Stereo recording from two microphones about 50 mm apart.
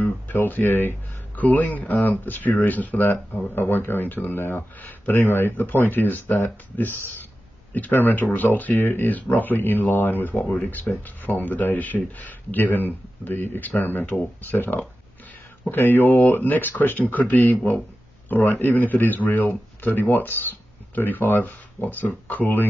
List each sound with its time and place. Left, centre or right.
0.0 s speech: left